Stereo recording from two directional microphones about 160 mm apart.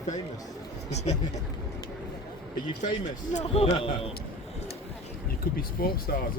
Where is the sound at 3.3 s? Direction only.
45° left (ahead or behind).